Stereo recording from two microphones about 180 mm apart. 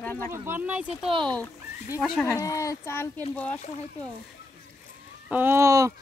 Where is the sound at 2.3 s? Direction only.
20° left (ahead or behind).